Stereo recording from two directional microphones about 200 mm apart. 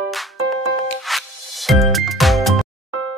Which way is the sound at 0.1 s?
Centre (ahead or behind).